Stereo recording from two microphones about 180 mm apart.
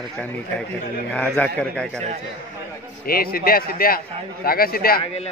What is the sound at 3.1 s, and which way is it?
A man's voice, 55° left (ahead or behind).